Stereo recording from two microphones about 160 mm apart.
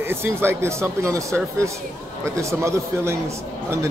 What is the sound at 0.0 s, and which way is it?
Speech, 15° right (ahead or behind).